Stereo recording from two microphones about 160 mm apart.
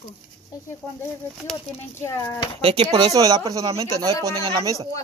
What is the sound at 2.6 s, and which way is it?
Speech, 40° right (ahead or behind).